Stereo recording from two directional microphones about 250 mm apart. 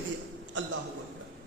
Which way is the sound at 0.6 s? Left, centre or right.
Right.